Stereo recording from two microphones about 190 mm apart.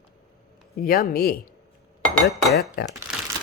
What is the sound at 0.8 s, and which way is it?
Speech, 50° left (ahead or behind).